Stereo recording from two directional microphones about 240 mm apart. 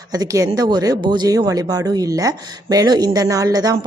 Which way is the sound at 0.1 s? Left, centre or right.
Centre.